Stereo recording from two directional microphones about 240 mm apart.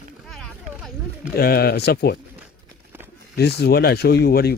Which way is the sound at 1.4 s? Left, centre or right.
Left.